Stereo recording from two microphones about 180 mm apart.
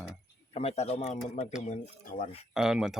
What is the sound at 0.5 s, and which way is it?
Speech, 35° left (ahead or behind).